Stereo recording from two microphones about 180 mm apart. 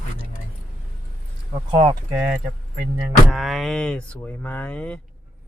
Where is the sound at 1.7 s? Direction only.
30° right (ahead or behind).